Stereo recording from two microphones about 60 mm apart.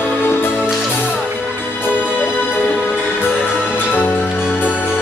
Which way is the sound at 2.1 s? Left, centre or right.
Left.